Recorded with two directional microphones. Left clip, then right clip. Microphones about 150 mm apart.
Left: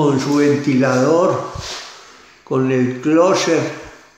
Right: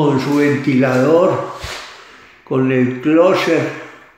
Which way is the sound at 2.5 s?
Centre (ahead or behind).